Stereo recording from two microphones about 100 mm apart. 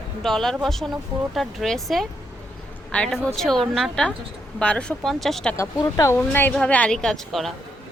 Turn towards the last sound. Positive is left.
turn(degrees=5)  # may be behind; listen again after turning